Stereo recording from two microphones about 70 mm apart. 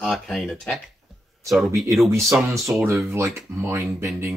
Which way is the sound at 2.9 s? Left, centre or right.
Right.